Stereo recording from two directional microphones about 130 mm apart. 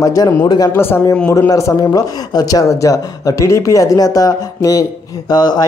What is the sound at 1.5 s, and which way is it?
Speech, 30° left (ahead or behind).